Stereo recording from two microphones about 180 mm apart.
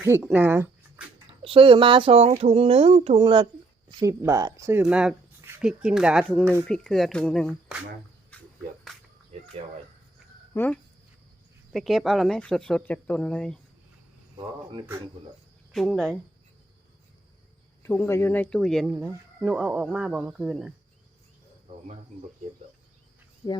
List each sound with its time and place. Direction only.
0.3 s speech: 10° right (ahead or behind)
1.4 s speech: 30° right (ahead or behind)
4.0 s speech: 15° right (ahead or behind)
4.8 s speech: 5° right (ahead or behind)
9.3 s cricket: 35° right (ahead or behind)
10.5 s speech: 10° left (ahead or behind)
11.7 s speech: centre (ahead or behind)
14.3 s speech: 25° right (ahead or behind)
15.7 s speech: centre (ahead or behind)
18.0 s speech: 15° left (ahead or behind)
18.5 s speech: centre (ahead or behind)